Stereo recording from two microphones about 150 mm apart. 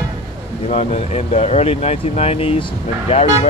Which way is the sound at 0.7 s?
45° left (ahead or behind).